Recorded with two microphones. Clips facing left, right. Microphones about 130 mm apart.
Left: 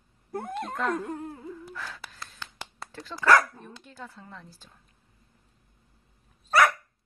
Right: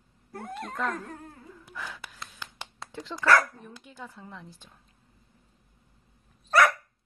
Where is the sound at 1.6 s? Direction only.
10° right (ahead or behind).